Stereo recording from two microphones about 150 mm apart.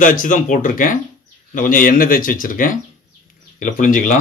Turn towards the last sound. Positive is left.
turn(degrees=60)  # may be behind; listen again after turning